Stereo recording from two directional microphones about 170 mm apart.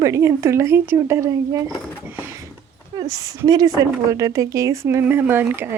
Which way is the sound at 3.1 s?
20° right (ahead or behind).